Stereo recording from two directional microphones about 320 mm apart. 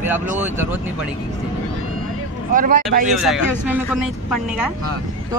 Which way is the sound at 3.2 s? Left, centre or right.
Centre.